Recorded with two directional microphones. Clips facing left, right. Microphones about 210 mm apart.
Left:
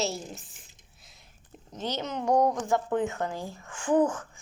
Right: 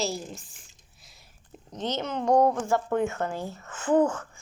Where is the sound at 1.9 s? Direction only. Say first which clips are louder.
Right 3 dB; 15° left (ahead or behind).